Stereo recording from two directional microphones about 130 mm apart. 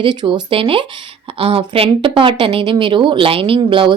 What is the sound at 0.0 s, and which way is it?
Speech, 40° right (ahead or behind).